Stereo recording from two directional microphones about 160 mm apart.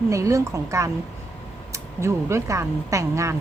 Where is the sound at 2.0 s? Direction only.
15° right (ahead or behind).